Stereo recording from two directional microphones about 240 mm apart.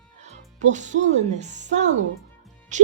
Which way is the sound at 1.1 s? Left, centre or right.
Right.